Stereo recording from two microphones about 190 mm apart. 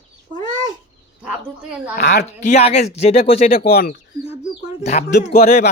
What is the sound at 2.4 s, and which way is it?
Speech, 35° left (ahead or behind).